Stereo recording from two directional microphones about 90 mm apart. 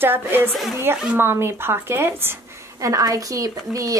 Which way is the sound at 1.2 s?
25° right (ahead or behind).